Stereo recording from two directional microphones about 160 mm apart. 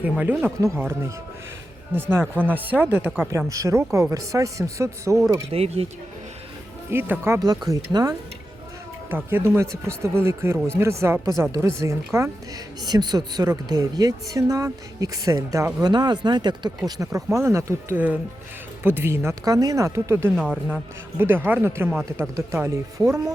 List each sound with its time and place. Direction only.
0.0 s speech: 10° right (ahead or behind)
2.0 s speech: 15° right (ahead or behind)
3.2 s a woman's voice: 20° right (ahead or behind)
5.5 s speech: 40° right (ahead or behind)
6.9 s a woman's voice: 15° right (ahead or behind)
20.3 s speech: 5° left (ahead or behind)
21.2 s speech: 15° right (ahead or behind)